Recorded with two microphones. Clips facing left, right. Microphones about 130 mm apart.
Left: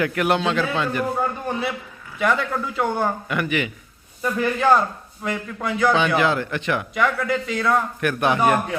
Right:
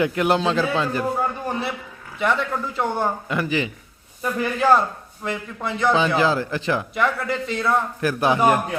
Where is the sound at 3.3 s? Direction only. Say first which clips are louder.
Even; 30° right (ahead or behind).